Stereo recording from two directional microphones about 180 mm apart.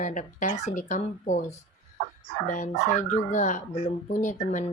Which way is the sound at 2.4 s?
45° left (ahead or behind).